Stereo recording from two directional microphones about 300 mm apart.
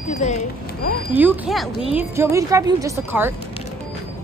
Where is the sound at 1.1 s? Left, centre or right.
Centre.